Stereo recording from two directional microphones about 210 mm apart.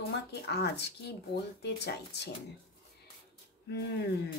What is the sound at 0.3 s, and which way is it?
A woman's voice, 50° left (ahead or behind).